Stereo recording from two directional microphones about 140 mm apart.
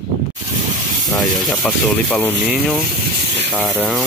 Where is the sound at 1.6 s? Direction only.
10° left (ahead or behind).